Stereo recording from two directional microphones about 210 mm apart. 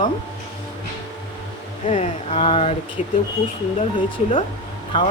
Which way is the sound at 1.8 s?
30° left (ahead or behind).